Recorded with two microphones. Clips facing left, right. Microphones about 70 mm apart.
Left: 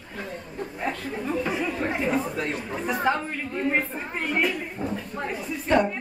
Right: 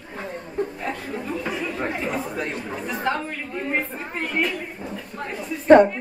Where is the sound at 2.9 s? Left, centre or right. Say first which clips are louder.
Left 1 dB; centre.